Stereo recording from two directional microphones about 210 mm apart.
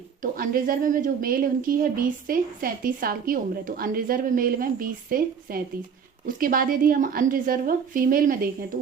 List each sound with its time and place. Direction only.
0.2 s a woman's voice: 45° right (ahead or behind)